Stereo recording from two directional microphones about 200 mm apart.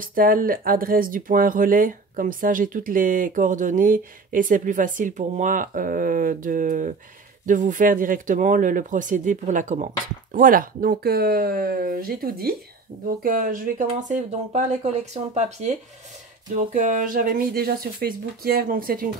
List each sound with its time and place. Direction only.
0.0 s speech: 45° right (ahead or behind)